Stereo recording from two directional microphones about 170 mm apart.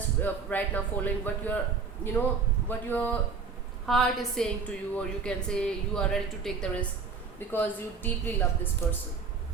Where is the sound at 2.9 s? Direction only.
10° left (ahead or behind).